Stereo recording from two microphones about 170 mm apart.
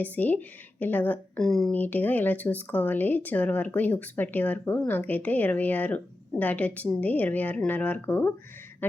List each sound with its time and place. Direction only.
0.0 s speech: 10° left (ahead or behind)
8.8 s duck: 10° left (ahead or behind)